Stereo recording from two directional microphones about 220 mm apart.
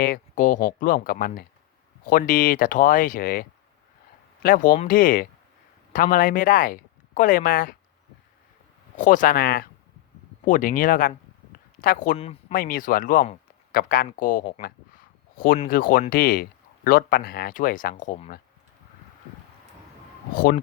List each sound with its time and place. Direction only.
0.0 s speech: 40° left (ahead or behind)
4.4 s speech: 40° left (ahead or behind)
9.0 s speech: 35° left (ahead or behind)
12.5 s speech: 40° left (ahead or behind)
20.3 s speech: 40° left (ahead or behind)